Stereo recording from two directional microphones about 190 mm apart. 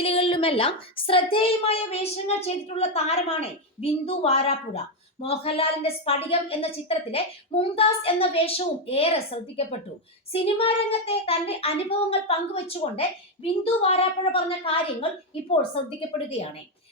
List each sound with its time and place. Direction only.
0.0 s a woman's voice: 30° left (ahead or behind)